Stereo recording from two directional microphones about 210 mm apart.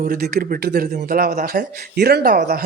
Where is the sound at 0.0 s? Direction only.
40° right (ahead or behind).